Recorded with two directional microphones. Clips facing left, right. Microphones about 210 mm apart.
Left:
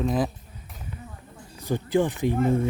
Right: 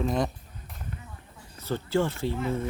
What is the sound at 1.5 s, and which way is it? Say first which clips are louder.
Speech: left 3 dB; 15° left (ahead or behind).